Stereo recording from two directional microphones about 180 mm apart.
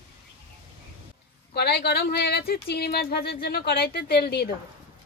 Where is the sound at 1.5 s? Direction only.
65° left (ahead or behind).